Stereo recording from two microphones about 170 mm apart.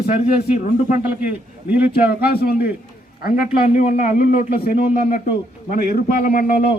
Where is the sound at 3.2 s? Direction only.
45° left (ahead or behind); by 6.6 s 60° left (ahead or behind).